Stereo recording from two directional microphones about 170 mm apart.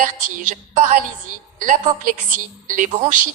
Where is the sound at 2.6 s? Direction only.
50° right (ahead or behind).